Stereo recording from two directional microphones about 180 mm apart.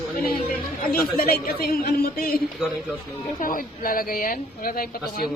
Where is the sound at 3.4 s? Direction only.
50° left (ahead or behind).